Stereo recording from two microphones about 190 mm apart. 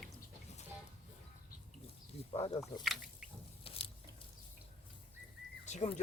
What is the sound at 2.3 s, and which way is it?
Speech, 30° left (ahead or behind).